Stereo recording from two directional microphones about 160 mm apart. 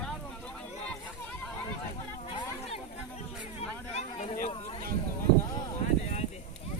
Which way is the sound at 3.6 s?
40° left (ahead or behind).